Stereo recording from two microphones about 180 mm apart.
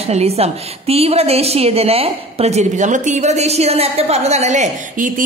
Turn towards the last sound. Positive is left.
turn(degrees=-45)  # may be behind; listen again after turning